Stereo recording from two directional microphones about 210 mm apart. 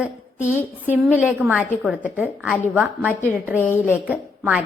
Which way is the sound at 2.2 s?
5° right (ahead or behind).